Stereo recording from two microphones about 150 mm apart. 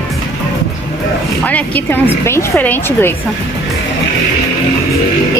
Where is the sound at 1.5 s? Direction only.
10° left (ahead or behind).